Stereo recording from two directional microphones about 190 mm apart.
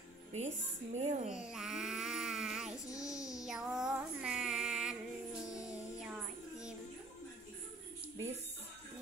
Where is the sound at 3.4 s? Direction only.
Centre (ahead or behind).